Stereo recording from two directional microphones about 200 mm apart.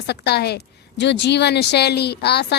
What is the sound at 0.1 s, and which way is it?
A woman's voice, 55° left (ahead or behind).